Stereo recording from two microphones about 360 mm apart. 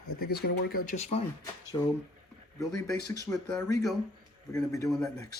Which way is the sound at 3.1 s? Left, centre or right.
Centre.